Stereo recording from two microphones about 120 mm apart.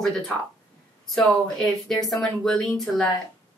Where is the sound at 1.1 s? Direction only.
5° left (ahead or behind).